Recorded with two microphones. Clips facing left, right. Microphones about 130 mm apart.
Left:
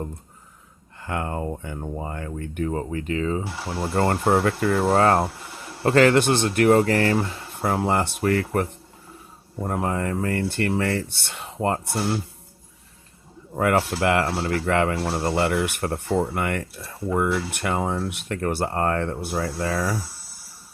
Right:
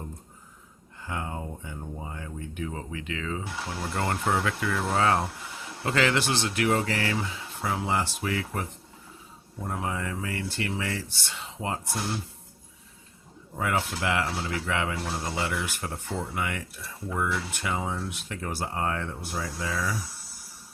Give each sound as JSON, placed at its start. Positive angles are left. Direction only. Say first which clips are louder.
{"t": 0.9, "sound": "speech", "louder": "left 6 dB", "side_deg": 65}
{"t": 2.6, "sound": "speech", "louder": "left 11 dB", "side_deg": 45}
{"t": 4.8, "sound": "speech", "louder": "left 6 dB", "side_deg": 55}
{"t": 9.6, "sound": "speech", "louder": "left 7 dB", "side_deg": 55}
{"t": 13.6, "sound": "speech", "louder": "left 8 dB", "side_deg": 65}
{"t": 16.3, "sound": "speech", "louder": "left 6 dB", "side_deg": 55}